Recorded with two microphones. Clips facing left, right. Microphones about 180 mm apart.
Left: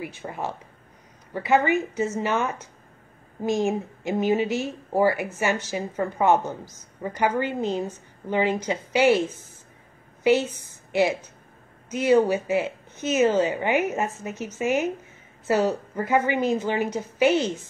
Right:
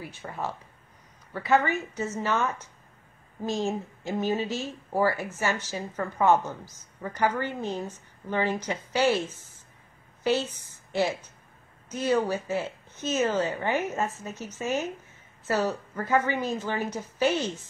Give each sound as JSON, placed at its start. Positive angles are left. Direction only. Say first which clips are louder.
{"t": 0.0, "sound": "a woman's voice", "louder": "left 3 dB", "side_deg": 15}
{"t": 10.2, "sound": "a woman's voice", "louder": "left 6 dB", "side_deg": 15}